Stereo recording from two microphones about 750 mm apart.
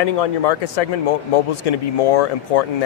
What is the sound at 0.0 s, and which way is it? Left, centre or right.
Speech, left.